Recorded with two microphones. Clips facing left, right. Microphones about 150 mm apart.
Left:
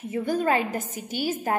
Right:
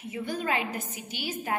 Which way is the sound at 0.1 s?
45° left (ahead or behind).